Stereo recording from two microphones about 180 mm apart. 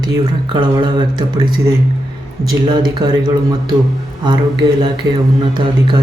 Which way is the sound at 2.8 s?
25° right (ahead or behind).